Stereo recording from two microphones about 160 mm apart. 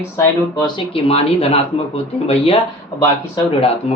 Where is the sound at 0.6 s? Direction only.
35° left (ahead or behind).